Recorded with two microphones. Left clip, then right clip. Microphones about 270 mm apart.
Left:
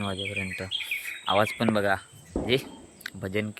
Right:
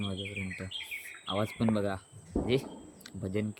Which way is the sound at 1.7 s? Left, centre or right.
Centre.